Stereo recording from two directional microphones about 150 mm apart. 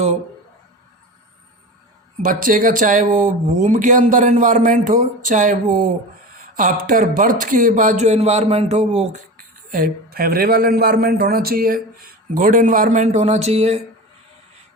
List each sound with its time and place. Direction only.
2.2 s speech: 65° right (ahead or behind); by 9.2 s 45° right (ahead or behind)
9.7 s a man's voice: 70° right (ahead or behind); by 13.7 s 45° right (ahead or behind)